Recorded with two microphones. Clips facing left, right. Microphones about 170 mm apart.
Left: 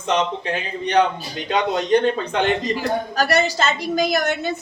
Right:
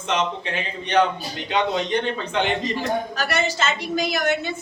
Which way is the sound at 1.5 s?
40° left (ahead or behind).